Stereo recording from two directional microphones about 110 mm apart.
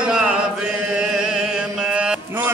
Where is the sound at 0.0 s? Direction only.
5° right (ahead or behind).